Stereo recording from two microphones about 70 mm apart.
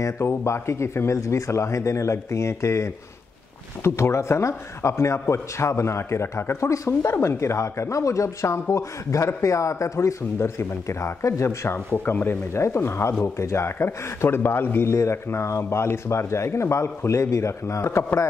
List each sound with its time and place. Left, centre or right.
0.0 s speech: left
11.9 s a man's voice: left